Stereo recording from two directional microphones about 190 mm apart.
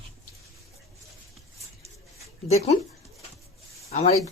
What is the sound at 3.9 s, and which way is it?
Speech, 35° left (ahead or behind).